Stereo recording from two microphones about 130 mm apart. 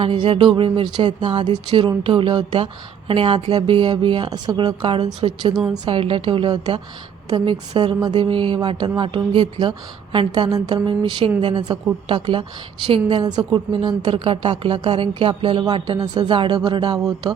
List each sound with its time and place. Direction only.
0.0 s a woman's voice: 45° right (ahead or behind)
5.9 s speech: 40° right (ahead or behind)